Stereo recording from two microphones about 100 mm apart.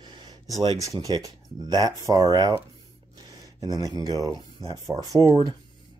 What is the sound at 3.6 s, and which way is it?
Speech, 45° right (ahead or behind).